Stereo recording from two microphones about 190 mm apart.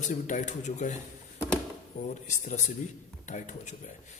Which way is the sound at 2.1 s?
40° left (ahead or behind).